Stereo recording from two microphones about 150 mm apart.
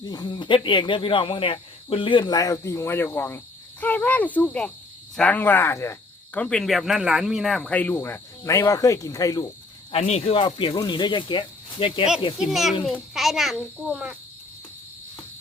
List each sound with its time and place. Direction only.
0.0 s speech: 25° left (ahead or behind)
6.4 s speech: 5° left (ahead or behind); by 9.5 s 25° left (ahead or behind)
9.9 s speech: 45° left (ahead or behind)
12.4 s a child's voice: centre (ahead or behind)